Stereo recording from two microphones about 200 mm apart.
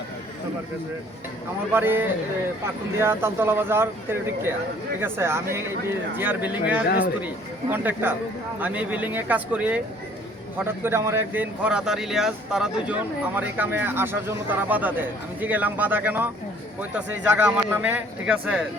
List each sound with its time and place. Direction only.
1.7 s speech: 10° right (ahead or behind)
6.8 s speech: 50° left (ahead or behind)
7.7 s speech: 10° right (ahead or behind)